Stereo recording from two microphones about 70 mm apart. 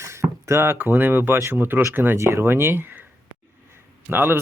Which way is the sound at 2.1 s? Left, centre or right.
Right.